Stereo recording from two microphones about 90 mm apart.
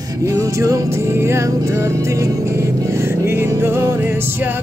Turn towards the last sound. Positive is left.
turn(degrees=-25)  # may be behind; listen again after turning